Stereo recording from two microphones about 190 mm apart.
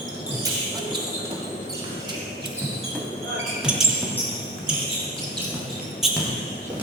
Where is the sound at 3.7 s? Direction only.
5° right (ahead or behind).